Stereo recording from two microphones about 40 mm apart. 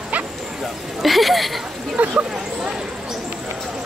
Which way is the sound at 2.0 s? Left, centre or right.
Right.